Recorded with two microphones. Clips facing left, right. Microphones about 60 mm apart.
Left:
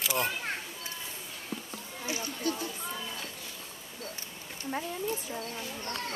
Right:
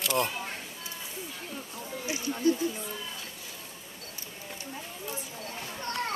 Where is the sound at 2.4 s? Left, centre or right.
Right.